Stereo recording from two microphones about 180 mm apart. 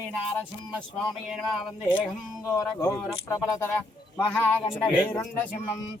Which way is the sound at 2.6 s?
15° left (ahead or behind).